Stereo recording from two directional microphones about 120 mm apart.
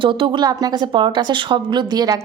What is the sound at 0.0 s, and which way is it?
Speech, 40° right (ahead or behind).